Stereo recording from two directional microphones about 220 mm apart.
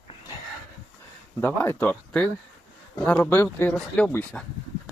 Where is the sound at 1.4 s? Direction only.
10° left (ahead or behind).